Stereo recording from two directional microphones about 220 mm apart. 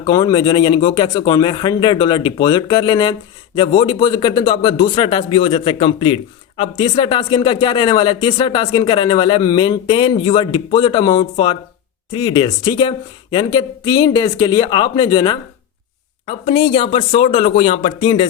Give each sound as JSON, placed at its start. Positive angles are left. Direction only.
{"t": 0.0, "sound": "speech", "side_deg": 15}